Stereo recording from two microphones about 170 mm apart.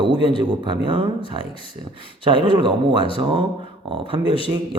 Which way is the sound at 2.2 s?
30° right (ahead or behind).